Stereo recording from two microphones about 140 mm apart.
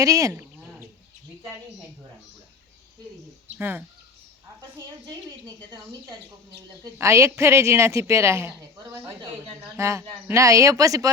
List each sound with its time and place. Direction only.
0.0 s a man's voice: 25° right (ahead or behind)
3.6 s speech: 15° right (ahead or behind)
7.0 s a man's voice: 20° right (ahead or behind)